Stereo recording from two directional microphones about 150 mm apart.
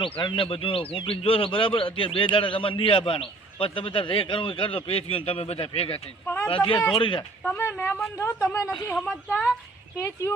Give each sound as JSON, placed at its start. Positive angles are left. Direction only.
{"t": 0.0, "sound": "speech", "side_deg": 35}
{"t": 6.2, "sound": "a sound", "side_deg": 15}
{"t": 6.9, "sound": "speech", "side_deg": 35}
{"t": 7.4, "sound": "a woman's voice", "side_deg": 15}